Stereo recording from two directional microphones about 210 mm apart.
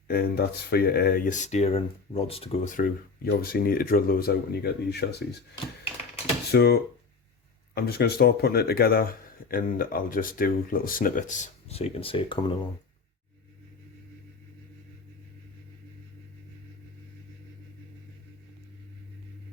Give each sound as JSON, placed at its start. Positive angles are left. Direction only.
{"t": 0.1, "sound": "speech", "side_deg": 50}
{"t": 2.7, "sound": "speech", "side_deg": 45}
{"t": 6.5, "sound": "speech", "side_deg": 50}
{"t": 7.8, "sound": "speech", "side_deg": 50}